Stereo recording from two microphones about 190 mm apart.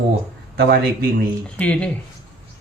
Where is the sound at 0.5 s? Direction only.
55° right (ahead or behind).